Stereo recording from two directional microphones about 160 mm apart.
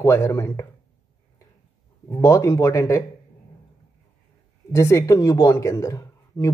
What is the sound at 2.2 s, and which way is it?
Speech, 20° left (ahead or behind).